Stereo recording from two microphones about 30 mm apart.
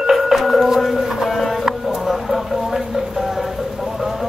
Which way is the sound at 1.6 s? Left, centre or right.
Centre.